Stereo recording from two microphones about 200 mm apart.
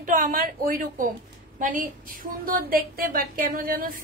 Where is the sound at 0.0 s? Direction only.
40° right (ahead or behind).